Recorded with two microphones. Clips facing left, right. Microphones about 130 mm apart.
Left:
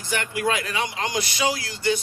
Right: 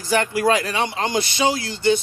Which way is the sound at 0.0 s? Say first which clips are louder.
Right 6 dB; 35° right (ahead or behind).